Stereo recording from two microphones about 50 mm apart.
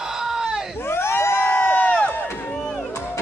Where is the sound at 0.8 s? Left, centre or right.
Left.